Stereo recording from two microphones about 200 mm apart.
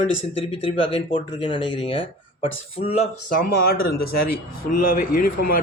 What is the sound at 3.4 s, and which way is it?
A man's voice, 50° left (ahead or behind).